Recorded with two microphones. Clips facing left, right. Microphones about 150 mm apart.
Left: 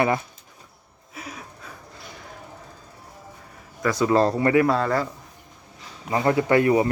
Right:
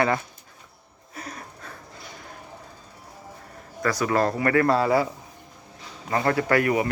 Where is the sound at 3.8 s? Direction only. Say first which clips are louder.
Left 3 dB; 20° left (ahead or behind).